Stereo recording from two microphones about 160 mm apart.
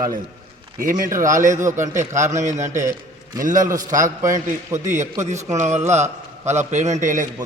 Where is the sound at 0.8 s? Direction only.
60° right (ahead or behind).